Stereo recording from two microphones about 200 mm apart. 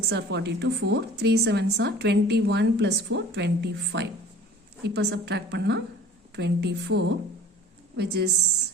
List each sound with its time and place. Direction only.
0.1 s a woman's voice: 55° right (ahead or behind)